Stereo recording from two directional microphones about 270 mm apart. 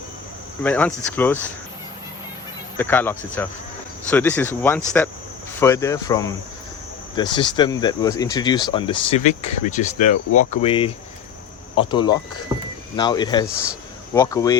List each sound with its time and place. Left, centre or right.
0.6 s speech: centre
2.7 s speech: centre